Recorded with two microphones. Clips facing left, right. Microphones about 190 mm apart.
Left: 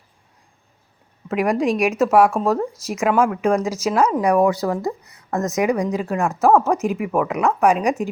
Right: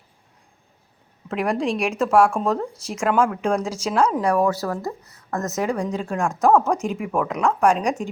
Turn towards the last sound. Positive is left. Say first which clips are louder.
# left 2 dB
turn(degrees=5)  # may be behind; listen again after turning